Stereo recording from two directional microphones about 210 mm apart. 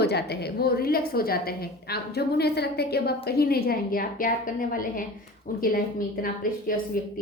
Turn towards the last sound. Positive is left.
turn(degrees=40)  # may be behind; listen again after turning